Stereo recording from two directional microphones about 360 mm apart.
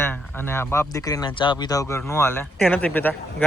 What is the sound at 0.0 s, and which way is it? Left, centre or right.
Speech, centre.